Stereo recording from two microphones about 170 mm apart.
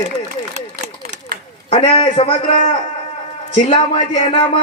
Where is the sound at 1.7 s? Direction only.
30° left (ahead or behind).